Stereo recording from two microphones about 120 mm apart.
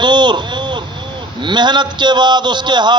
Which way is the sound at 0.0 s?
40° right (ahead or behind).